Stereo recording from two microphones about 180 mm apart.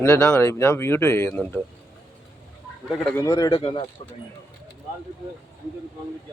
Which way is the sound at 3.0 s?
10° left (ahead or behind).